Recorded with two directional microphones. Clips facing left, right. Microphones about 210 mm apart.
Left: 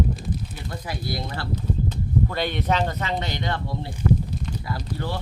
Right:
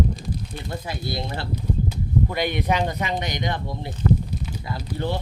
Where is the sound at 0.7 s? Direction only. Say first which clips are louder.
Right 1 dB; 25° right (ahead or behind).